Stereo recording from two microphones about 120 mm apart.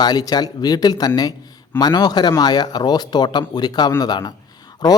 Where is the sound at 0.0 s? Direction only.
35° left (ahead or behind).